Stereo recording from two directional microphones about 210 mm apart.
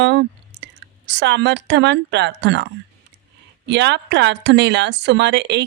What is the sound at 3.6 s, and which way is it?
Speech, 55° right (ahead or behind).